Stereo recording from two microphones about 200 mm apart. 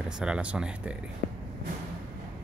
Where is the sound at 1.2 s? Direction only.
60° left (ahead or behind).